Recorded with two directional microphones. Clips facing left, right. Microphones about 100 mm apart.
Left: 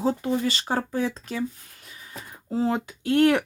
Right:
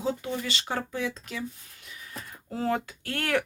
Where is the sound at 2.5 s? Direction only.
20° left (ahead or behind).